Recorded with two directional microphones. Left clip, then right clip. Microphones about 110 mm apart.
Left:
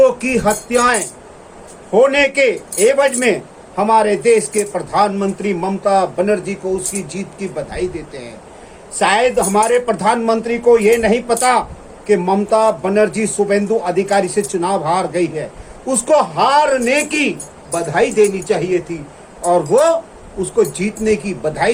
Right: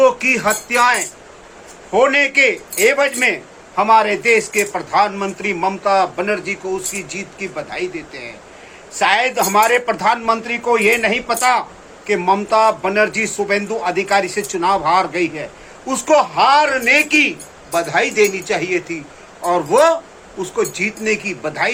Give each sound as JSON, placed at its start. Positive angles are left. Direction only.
{"t": 0.0, "sound": "music", "side_deg": -20}
{"t": 1.9, "sound": "speech", "side_deg": -25}
{"t": 9.0, "sound": "speech", "side_deg": -35}
{"t": 19.5, "sound": "speech", "side_deg": -30}